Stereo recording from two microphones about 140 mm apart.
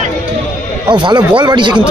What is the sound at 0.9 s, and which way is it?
Speech, 35° right (ahead or behind).